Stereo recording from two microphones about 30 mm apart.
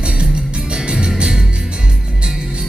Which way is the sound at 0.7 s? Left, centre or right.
Right.